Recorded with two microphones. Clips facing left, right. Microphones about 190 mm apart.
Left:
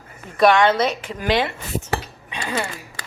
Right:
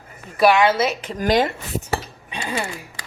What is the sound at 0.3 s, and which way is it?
Speech, 5° right (ahead or behind).